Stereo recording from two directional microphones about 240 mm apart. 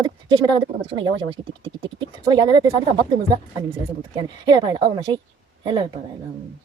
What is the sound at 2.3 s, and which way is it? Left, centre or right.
Speech, centre.